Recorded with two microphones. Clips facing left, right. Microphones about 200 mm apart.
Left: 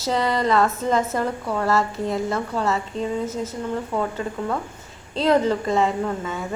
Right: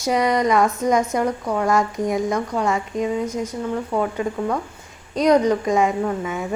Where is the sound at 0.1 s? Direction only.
15° right (ahead or behind).